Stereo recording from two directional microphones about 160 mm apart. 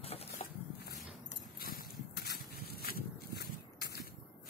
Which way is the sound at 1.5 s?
65° left (ahead or behind).